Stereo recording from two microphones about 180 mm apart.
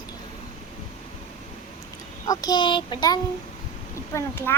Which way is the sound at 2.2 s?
20° left (ahead or behind).